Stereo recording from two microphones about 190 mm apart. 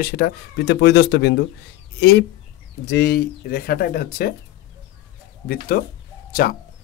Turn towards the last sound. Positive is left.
turn(degrees=55)  # may be behind; listen again after turning